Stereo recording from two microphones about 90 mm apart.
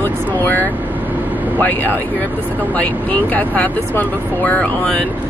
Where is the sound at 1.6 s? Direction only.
20° left (ahead or behind).